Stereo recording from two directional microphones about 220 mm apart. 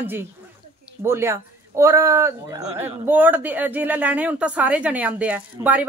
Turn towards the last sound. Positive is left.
turn(degrees=-5)  # may be behind; listen again after turning